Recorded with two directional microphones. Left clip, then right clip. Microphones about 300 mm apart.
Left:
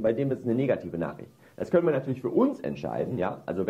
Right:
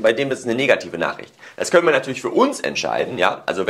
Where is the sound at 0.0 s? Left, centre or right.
Centre.